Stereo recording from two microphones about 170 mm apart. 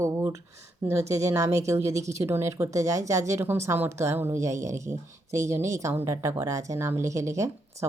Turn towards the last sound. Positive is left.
turn(degrees=-20)  # may be behind; listen again after turning